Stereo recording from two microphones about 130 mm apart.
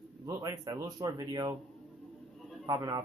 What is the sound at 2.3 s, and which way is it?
Bird, centre (ahead or behind).